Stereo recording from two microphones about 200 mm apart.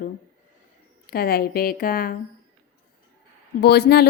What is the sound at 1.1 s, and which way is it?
A woman's voice, 50° left (ahead or behind).